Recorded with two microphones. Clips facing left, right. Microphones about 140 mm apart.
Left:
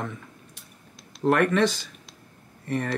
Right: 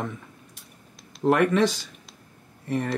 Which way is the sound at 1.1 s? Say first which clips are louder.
Right 1 dB; centre (ahead or behind).